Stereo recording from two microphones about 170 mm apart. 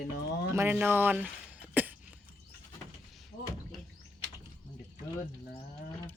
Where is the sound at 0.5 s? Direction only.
10° right (ahead or behind).